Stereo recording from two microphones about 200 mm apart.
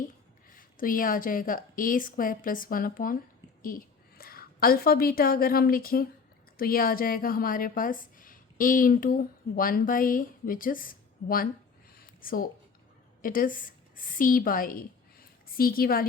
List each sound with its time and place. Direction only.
0.5 s a woman's voice: 45° left (ahead or behind)
11.9 s a sound: 45° left (ahead or behind)
13.2 s a woman's voice: 45° left (ahead or behind)